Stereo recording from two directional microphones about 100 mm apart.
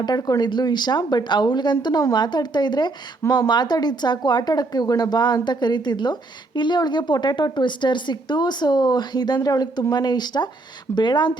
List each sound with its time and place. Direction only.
0.0 s speech: 40° left (ahead or behind)